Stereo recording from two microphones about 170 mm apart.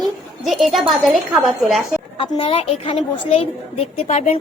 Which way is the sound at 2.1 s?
35° left (ahead or behind).